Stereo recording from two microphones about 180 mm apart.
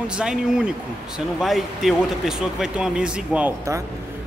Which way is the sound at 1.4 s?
Centre (ahead or behind).